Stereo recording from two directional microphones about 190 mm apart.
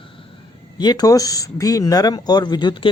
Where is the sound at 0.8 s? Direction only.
20° left (ahead or behind).